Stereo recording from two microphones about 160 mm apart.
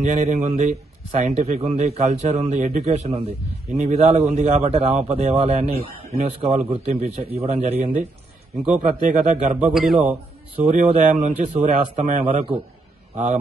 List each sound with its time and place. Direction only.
0.0 s a man's voice: 50° right (ahead or behind)
8.6 s a man's voice: 50° right (ahead or behind)
9.7 s a man's voice: 5° right (ahead or behind)
10.7 s a man's voice: 50° right (ahead or behind)